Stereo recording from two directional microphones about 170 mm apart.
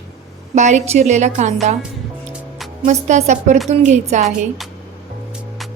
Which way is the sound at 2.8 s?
40° right (ahead or behind).